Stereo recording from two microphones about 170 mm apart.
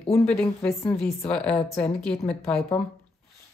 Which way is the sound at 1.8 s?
5° left (ahead or behind).